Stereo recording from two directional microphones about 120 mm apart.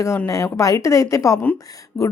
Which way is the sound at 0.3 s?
25° left (ahead or behind).